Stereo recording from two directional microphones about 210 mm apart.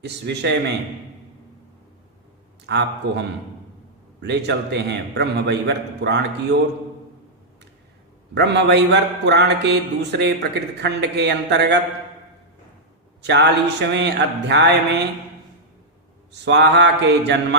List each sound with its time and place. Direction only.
0.0 s a man's voice: 55° right (ahead or behind)
2.6 s a man's voice: 55° right (ahead or behind)
8.4 s a man's voice: 55° right (ahead or behind)
13.2 s a sound: 55° right (ahead or behind)
16.3 s a man's voice: 55° right (ahead or behind)